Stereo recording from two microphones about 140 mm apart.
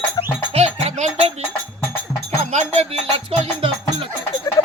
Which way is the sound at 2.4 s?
50° right (ahead or behind).